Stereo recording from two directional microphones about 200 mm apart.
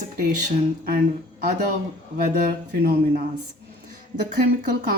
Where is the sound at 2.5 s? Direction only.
50° right (ahead or behind).